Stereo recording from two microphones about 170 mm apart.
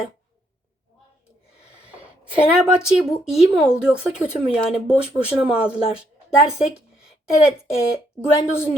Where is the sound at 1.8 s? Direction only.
10° right (ahead or behind).